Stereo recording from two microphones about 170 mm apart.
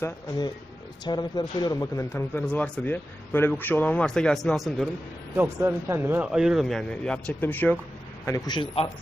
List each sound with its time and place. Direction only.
0.0 s a man's voice: 25° left (ahead or behind); by 4.9 s centre (ahead or behind)
5.4 s a man's voice: 15° right (ahead or behind); by 7.8 s 10° left (ahead or behind)